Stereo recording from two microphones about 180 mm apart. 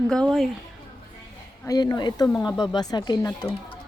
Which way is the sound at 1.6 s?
20° left (ahead or behind).